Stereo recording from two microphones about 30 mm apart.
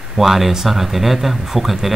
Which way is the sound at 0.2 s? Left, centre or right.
Centre.